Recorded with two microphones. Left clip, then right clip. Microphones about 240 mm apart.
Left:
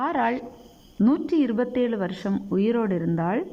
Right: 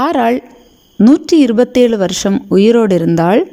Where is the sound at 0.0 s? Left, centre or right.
Right.